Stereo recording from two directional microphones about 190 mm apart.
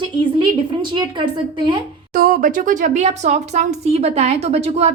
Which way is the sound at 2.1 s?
50° right (ahead or behind).